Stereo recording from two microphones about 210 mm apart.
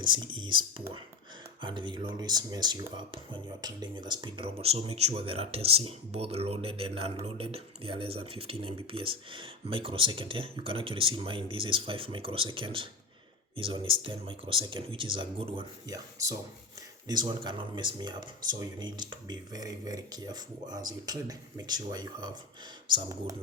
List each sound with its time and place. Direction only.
0.0 s speech: 20° right (ahead or behind)
1.6 s speech: 20° right (ahead or behind)